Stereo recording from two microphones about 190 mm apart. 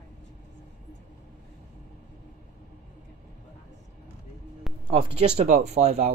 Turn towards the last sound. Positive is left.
turn(degrees=-35)  # may be behind; listen again after turning